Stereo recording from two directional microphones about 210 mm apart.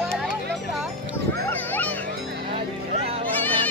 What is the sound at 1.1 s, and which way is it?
Children playing, 10° left (ahead or behind).